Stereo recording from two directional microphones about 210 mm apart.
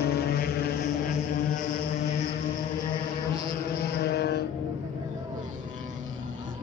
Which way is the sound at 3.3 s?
25° right (ahead or behind).